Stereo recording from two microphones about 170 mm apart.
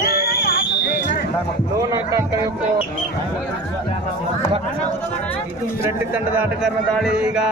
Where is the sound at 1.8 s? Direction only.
20° right (ahead or behind).